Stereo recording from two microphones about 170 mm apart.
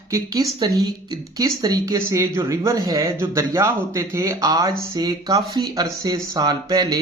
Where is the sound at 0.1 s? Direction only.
20° right (ahead or behind).